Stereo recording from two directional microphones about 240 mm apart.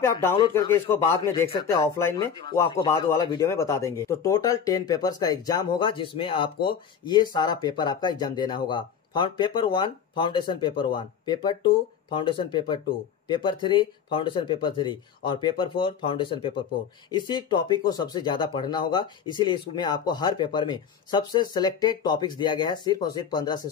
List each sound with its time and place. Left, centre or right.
0.0 s speech: centre